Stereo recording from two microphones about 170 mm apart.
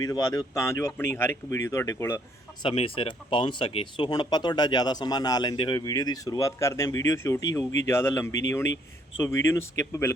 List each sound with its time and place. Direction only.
0.0 s speech: 20° left (ahead or behind)
2.6 s speech: 35° left (ahead or behind); by 10.1 s 15° left (ahead or behind)